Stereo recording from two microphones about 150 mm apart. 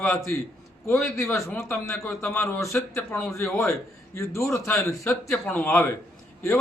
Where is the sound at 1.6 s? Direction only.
20° left (ahead or behind).